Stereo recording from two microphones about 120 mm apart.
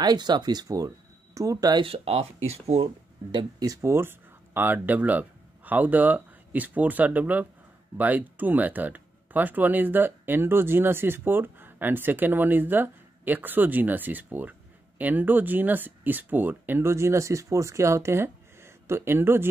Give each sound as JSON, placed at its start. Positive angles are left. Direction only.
{"t": 0.0, "sound": "speech", "side_deg": -35}
{"t": 1.8, "sound": "speech", "side_deg": -55}
{"t": 3.3, "sound": "speech", "side_deg": -40}